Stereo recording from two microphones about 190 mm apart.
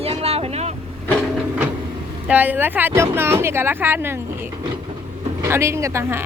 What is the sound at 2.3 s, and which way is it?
Speech, 10° right (ahead or behind).